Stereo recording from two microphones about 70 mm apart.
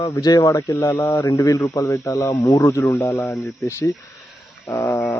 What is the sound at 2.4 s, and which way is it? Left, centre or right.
Speech, left.